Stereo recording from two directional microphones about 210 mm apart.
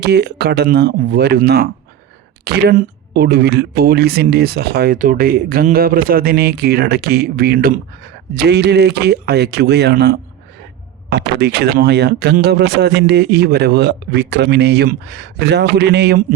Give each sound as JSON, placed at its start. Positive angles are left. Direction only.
{"t": 0.0, "sound": "speech", "side_deg": -50}